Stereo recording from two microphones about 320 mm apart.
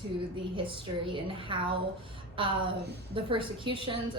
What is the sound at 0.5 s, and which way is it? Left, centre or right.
A woman's voice, centre.